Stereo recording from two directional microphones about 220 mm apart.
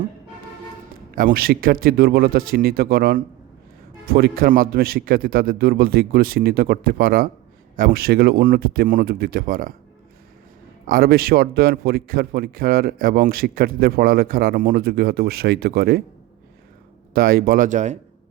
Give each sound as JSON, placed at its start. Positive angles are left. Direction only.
{"t": 1.1, "sound": "a man's voice", "side_deg": -40}
{"t": 10.8, "sound": "a man's voice", "side_deg": -40}
{"t": 17.2, "sound": "speech", "side_deg": -40}